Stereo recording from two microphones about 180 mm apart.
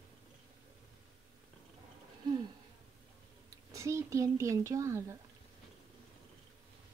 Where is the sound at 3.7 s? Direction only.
15° right (ahead or behind).